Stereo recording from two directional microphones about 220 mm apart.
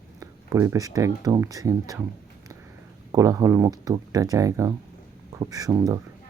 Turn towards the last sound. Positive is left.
turn(degrees=-15)  # may be behind; listen again after turning